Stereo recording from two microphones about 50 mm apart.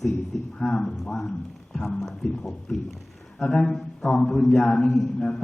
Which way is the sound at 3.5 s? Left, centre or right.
Centre.